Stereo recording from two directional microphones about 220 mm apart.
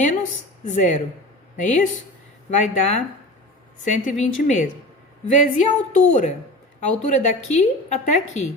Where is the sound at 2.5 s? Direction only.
30° left (ahead or behind).